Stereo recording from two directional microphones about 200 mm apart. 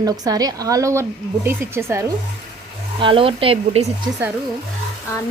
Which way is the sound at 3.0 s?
25° right (ahead or behind).